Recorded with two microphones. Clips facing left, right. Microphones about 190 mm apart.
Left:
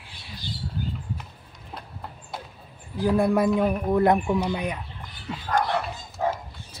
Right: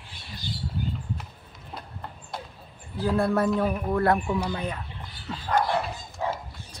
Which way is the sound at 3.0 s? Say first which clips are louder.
Left 3 dB; 15° left (ahead or behind).